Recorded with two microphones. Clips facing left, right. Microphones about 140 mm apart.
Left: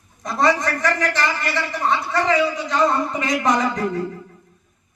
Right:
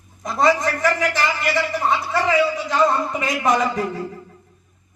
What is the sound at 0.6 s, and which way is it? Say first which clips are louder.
A man's voice: right 1 dB; 10° right (ahead or behind).